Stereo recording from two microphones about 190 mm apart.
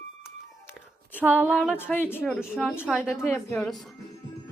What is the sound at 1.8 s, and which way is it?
Speech, 10° left (ahead or behind).